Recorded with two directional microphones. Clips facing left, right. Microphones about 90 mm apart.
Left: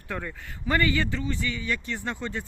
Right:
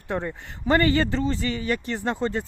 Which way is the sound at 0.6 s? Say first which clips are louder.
Right 5 dB; 40° right (ahead or behind).